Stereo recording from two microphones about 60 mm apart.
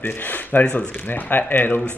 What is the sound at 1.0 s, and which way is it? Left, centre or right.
Speech, left.